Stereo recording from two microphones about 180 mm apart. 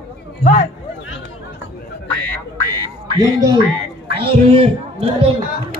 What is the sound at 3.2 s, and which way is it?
Speech, 20° right (ahead or behind).